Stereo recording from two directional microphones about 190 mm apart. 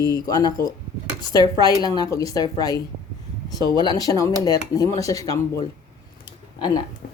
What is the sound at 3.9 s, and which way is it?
Speech, 20° left (ahead or behind).